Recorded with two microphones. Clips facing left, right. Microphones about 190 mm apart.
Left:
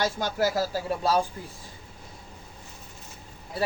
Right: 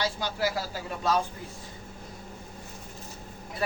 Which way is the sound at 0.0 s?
45° left (ahead or behind).